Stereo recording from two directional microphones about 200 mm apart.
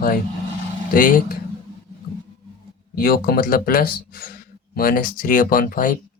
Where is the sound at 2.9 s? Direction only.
45° left (ahead or behind).